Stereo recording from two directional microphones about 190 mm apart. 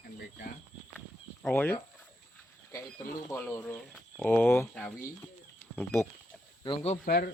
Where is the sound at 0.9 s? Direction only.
10° left (ahead or behind).